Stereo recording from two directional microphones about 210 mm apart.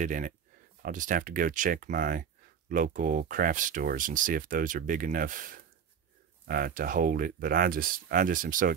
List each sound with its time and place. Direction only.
0.0 s speech: 40° right (ahead or behind)